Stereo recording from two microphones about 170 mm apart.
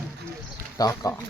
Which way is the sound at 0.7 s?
20° left (ahead or behind).